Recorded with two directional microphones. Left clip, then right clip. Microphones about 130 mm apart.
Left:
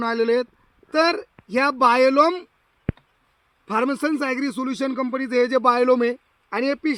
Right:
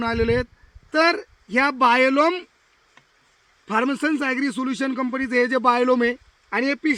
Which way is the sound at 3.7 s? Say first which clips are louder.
Even; 35° right (ahead or behind).